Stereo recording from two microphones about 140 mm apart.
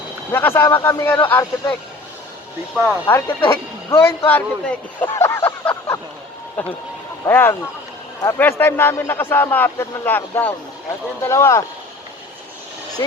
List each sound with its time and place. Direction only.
0.3 s speech: 15° left (ahead or behind)
3.1 s speech: 15° left (ahead or behind)
13.0 s speech: 25° left (ahead or behind)